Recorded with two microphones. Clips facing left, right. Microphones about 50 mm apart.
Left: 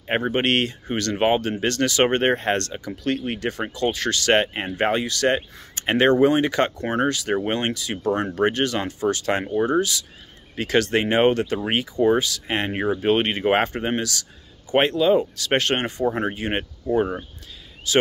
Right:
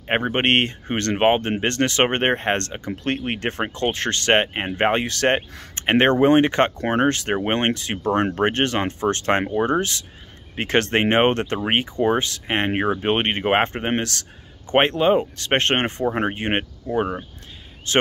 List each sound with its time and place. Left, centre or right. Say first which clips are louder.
0.0 s speech: right 1 dB; right
17.9 s speech: even; right